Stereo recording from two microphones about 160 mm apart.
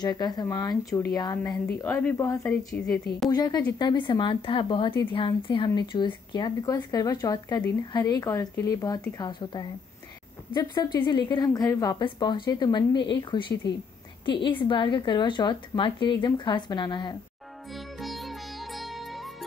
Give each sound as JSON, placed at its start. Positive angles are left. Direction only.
{"t": 0.0, "sound": "a woman's voice", "side_deg": 25}
{"t": 17.7, "sound": "music", "side_deg": 0}